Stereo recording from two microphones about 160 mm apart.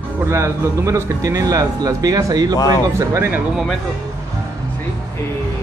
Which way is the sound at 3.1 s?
15° right (ahead or behind).